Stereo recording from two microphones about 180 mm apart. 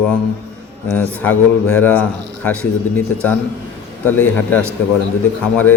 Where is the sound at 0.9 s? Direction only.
10° left (ahead or behind).